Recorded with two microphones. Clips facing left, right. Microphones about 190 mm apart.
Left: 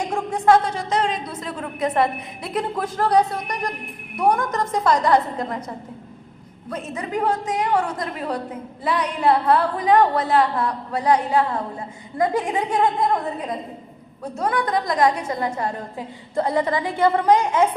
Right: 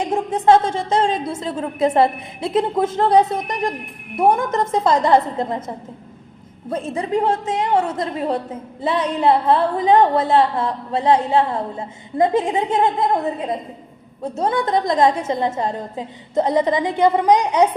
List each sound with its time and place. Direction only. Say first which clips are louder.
0.0 s a woman's voice: right 3 dB; 25° right (ahead or behind)